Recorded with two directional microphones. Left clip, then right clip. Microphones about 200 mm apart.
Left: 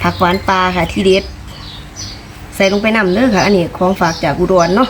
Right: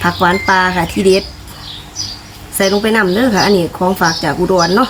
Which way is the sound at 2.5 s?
15° right (ahead or behind).